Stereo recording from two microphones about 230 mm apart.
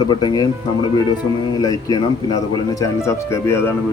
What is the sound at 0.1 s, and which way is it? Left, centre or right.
Speech, centre.